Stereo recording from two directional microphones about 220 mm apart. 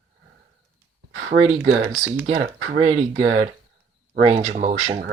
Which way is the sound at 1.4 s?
25° right (ahead or behind).